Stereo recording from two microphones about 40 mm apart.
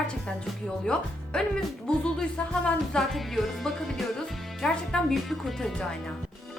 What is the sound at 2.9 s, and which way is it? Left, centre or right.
Speech, centre.